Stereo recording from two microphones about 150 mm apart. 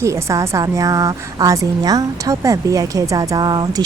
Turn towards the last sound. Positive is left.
turn(degrees=-25)  # may be behind; listen again after turning